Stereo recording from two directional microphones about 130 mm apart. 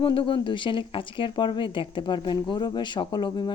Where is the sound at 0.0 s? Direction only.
40° left (ahead or behind).